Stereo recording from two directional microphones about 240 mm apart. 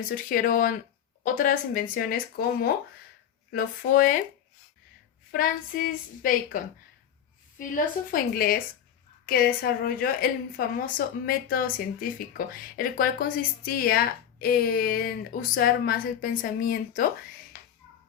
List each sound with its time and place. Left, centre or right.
0.1 s a woman's voice: left
5.3 s a woman's voice: left
7.6 s a woman's voice: left